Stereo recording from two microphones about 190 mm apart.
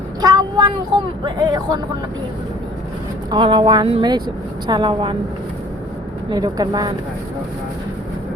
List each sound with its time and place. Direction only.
0.2 s speech: 20° right (ahead or behind)
3.2 s speech: 25° right (ahead or behind)
6.3 s speech: 20° right (ahead or behind)